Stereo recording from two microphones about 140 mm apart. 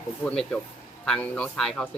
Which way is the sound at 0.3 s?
5° left (ahead or behind).